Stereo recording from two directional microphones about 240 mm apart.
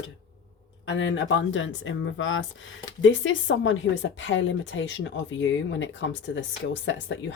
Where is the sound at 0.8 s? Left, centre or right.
Left.